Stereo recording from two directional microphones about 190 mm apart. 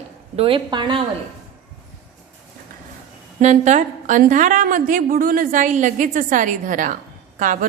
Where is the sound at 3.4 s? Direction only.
40° right (ahead or behind).